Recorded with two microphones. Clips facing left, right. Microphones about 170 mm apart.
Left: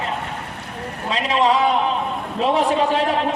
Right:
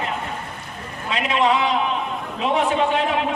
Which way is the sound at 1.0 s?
35° left (ahead or behind).